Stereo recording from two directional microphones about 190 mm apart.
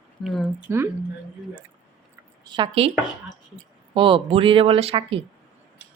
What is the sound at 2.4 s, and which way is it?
Speech, 25° right (ahead or behind).